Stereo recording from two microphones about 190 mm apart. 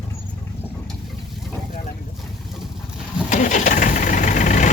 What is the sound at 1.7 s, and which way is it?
Vehicle, 45° left (ahead or behind).